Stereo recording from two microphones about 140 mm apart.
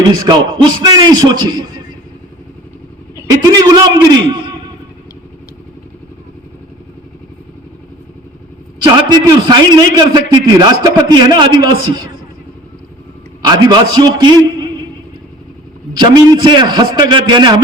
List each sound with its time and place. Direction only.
0.2 s a man's voice: 30° right (ahead or behind)
3.2 s a man's voice: 25° right (ahead or behind)
8.8 s a man's voice: 30° right (ahead or behind)
13.4 s a man's voice: 30° right (ahead or behind)
16.0 s a man's voice: 30° right (ahead or behind)